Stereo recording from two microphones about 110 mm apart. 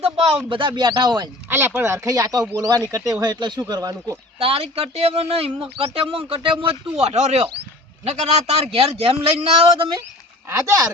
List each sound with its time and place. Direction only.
0.0 s speech: 60° right (ahead or behind)
0.4 s speech: 45° right (ahead or behind)
1.5 s speech: 20° right (ahead or behind)
4.4 s speech: 60° right (ahead or behind)